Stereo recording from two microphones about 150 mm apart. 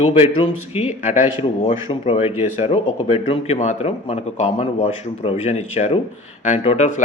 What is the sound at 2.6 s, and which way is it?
Speech, 40° left (ahead or behind).